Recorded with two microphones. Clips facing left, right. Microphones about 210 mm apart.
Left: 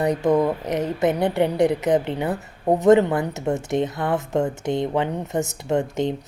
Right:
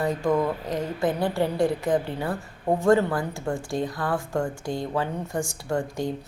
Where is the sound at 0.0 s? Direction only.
20° left (ahead or behind).